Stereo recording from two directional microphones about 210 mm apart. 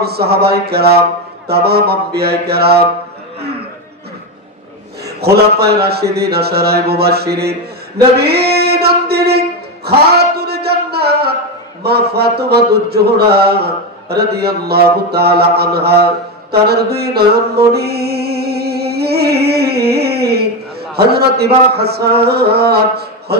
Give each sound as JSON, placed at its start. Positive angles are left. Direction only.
{"t": 0.0, "sound": "speech", "side_deg": -50}
{"t": 5.0, "sound": "speech", "side_deg": -50}
{"t": 8.2, "sound": "music", "side_deg": -50}
{"t": 11.8, "sound": "speech", "side_deg": -50}
{"t": 16.6, "sound": "mantra", "side_deg": -50}
{"t": 20.9, "sound": "speech", "side_deg": -50}